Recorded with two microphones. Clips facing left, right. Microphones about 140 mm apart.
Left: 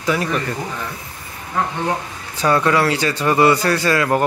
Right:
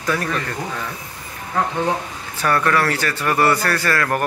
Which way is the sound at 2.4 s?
15° left (ahead or behind).